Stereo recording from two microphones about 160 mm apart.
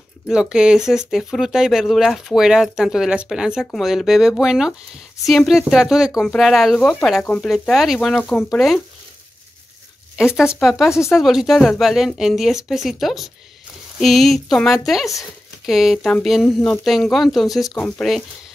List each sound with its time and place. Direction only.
0.3 s speech: 5° right (ahead or behind)
10.1 s speech: 5° right (ahead or behind)